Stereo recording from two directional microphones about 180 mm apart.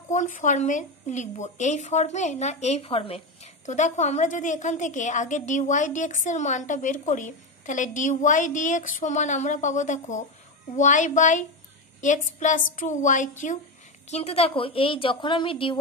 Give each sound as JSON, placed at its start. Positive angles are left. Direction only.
{"t": 0.1, "sound": "a woman's voice", "side_deg": 45}